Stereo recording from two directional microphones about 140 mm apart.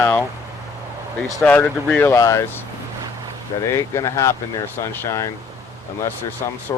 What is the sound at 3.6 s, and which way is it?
Speech, 20° left (ahead or behind).